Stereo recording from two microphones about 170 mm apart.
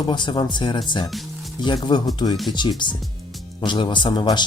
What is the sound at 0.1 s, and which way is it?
Speech, 25° left (ahead or behind).